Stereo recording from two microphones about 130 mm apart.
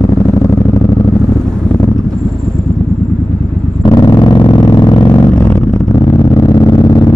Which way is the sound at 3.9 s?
30° left (ahead or behind).